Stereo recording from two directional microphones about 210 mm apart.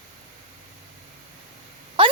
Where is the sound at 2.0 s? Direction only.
25° right (ahead or behind).